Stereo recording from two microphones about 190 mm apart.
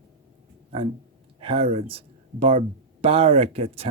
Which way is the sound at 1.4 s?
30° right (ahead or behind).